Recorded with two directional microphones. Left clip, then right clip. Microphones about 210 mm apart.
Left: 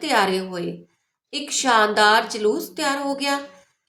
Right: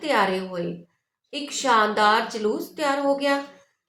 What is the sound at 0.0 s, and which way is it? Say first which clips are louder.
A woman's voice: left 2 dB; 50° left (ahead or behind).